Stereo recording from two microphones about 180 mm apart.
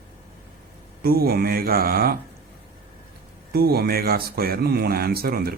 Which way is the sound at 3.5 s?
60° right (ahead or behind).